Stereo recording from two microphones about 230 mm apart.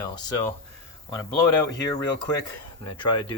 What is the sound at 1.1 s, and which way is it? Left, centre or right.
Speech, centre.